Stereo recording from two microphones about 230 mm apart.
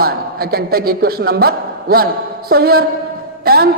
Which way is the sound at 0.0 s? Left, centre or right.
Right.